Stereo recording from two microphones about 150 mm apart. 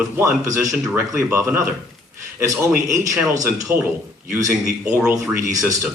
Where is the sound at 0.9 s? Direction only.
15° right (ahead or behind).